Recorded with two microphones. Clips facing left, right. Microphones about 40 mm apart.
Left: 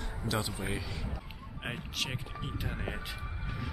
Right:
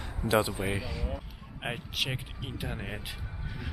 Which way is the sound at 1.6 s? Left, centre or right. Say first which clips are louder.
Right 3 dB; centre.